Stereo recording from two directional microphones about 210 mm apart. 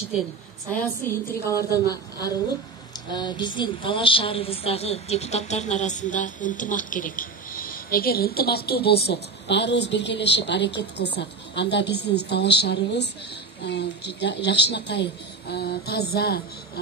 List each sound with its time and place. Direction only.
0.7 s a woman's voice: 10° left (ahead or behind); by 16.4 s 50° left (ahead or behind)